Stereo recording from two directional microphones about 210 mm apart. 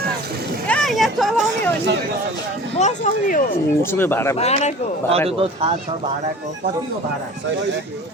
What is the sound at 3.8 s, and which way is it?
Speech, 10° left (ahead or behind).